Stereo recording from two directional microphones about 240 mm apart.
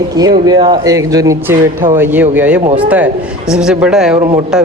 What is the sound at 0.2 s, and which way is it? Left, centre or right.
Speech, centre.